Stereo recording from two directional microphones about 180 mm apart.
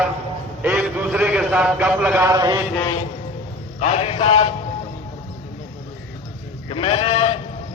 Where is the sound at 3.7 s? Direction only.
35° left (ahead or behind).